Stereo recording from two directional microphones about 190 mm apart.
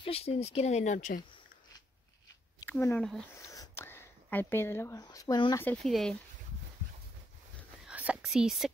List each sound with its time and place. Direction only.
0.0 s speech: 30° left (ahead or behind)
2.8 s speech: 10° left (ahead or behind)
3.3 s a sound: 15° left (ahead or behind)
5.6 s speech: 5° left (ahead or behind)
7.8 s whispering: 5° right (ahead or behind)